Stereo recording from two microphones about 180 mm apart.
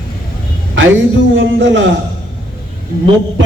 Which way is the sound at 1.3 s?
90° right.